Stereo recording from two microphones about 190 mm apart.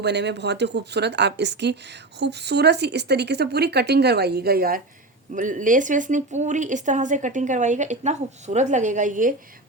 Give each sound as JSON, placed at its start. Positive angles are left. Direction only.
{"t": 0.0, "sound": "a woman's voice", "side_deg": -65}